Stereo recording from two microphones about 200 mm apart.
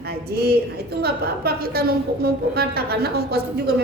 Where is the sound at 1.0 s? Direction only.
50° right (ahead or behind).